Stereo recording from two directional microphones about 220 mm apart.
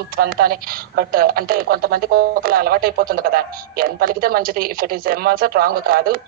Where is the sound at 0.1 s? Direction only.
40° right (ahead or behind).